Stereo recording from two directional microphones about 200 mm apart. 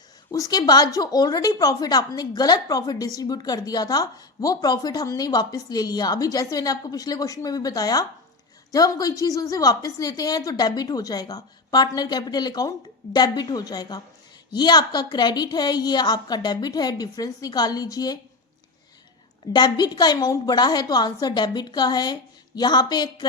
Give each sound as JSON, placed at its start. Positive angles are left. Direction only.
{"t": 0.3, "sound": "a woman's voice", "side_deg": 15}
{"t": 19.5, "sound": "a woman's voice", "side_deg": 20}